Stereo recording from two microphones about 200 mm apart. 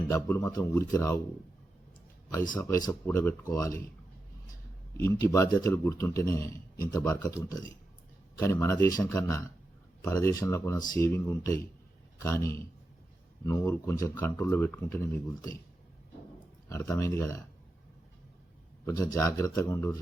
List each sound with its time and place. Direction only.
0.1 s a man's voice: 10° left (ahead or behind)
2.6 s a man's voice: 15° left (ahead or behind)
4.9 s a man's voice: 15° left (ahead or behind)
16.9 s a man's voice: 15° left (ahead or behind)
18.9 s a man's voice: 15° left (ahead or behind)